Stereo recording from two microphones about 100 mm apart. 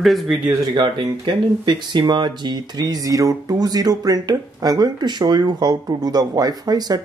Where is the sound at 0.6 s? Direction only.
45° right (ahead or behind).